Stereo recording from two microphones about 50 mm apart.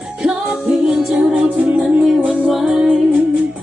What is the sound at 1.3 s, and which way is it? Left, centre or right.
Music, right.